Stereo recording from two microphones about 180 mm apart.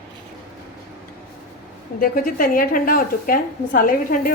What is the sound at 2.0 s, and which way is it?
A woman's voice, 50° left (ahead or behind).